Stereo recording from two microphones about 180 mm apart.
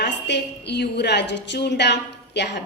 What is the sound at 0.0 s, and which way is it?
A woman's voice, 70° left (ahead or behind).